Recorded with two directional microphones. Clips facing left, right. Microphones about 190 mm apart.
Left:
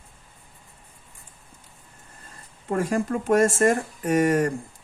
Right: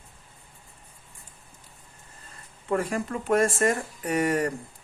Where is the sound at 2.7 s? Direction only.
45° left (ahead or behind).